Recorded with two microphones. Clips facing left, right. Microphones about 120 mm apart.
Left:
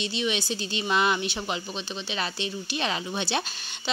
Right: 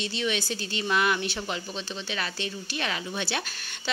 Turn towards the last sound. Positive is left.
turn(degrees=20)  # may be behind; listen again after turning